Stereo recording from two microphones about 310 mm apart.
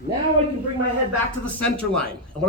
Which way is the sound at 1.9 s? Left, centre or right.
Centre.